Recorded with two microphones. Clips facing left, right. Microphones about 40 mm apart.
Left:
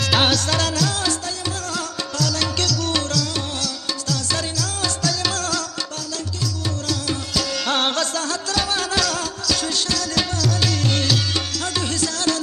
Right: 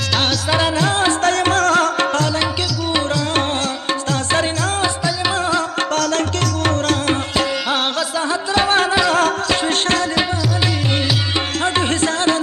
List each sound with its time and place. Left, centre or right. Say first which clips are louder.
0.1 s music: left 1 dB; centre
0.5 s music: right 5 dB; right
1.2 s music: right 13 dB; right
4.1 s music: right 6 dB; right
5.9 s music: right 11 dB; right
8.3 s music: right 7 dB; right
11.6 s music: right 9 dB; right